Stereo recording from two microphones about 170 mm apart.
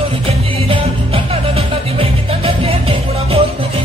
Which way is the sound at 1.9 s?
35° right (ahead or behind).